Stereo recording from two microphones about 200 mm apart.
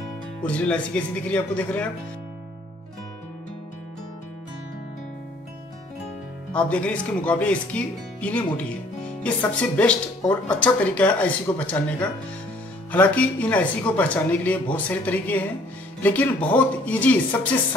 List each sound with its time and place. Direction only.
0.4 s speech: 5° left (ahead or behind)
6.5 s speech: 5° left (ahead or behind)